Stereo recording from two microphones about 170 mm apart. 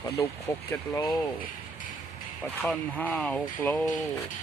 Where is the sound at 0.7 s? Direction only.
15° left (ahead or behind).